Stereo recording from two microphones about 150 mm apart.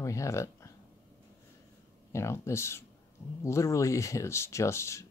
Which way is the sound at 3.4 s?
20° left (ahead or behind).